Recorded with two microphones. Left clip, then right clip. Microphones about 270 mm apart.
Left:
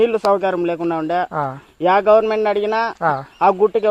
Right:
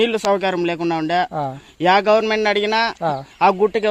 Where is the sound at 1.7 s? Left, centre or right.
Right.